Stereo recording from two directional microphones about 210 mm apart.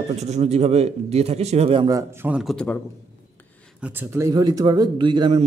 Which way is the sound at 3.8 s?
10° right (ahead or behind).